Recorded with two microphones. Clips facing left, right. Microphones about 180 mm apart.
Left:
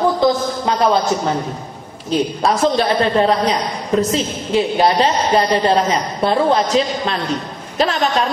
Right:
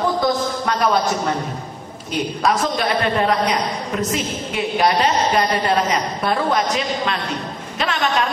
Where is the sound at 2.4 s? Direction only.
30° left (ahead or behind).